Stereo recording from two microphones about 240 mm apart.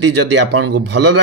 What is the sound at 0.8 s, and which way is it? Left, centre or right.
Speech, right.